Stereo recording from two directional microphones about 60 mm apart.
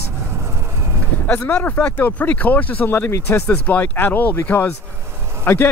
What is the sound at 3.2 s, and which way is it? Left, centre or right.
Speech, left.